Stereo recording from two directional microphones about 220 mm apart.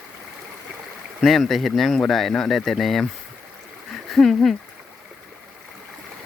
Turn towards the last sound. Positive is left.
turn(degrees=0)  # may be behind; listen again after turning